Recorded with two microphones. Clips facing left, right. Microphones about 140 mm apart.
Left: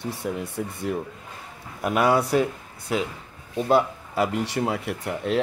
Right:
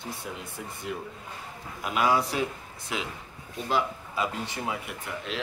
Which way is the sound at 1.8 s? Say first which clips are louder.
Left 5 dB; 55° left (ahead or behind).